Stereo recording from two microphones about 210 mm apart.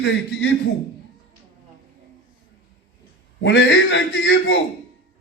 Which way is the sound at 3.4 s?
60° left (ahead or behind).